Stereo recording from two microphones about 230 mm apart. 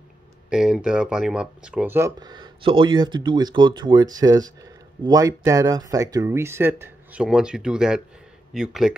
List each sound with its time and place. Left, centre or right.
0.5 s speech: centre